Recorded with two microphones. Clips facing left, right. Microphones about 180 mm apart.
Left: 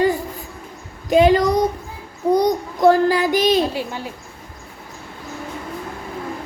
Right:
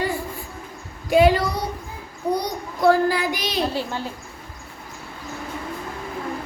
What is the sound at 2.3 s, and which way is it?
Child singing, 45° left (ahead or behind).